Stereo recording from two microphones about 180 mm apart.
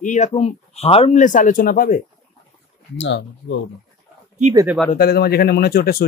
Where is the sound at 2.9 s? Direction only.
90° left.